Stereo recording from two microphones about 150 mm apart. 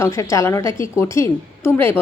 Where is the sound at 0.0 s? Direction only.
20° left (ahead or behind).